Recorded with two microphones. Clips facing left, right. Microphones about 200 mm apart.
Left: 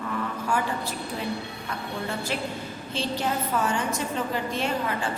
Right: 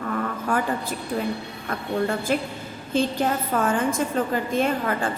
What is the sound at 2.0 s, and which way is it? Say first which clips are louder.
A woman's voice: right 5 dB; 50° right (ahead or behind).